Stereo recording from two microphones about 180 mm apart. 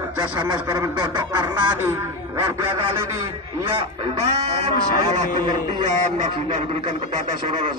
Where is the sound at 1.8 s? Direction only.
15° right (ahead or behind).